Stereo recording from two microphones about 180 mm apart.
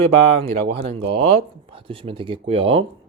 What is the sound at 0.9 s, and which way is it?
Speech, 30° right (ahead or behind).